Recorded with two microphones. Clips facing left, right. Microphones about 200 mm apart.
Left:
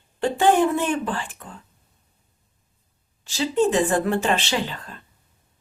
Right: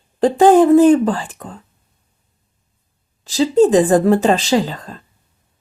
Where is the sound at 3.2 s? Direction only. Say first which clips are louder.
Right 8 dB; 40° right (ahead or behind).